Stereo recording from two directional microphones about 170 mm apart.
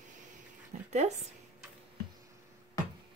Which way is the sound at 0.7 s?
45° right (ahead or behind).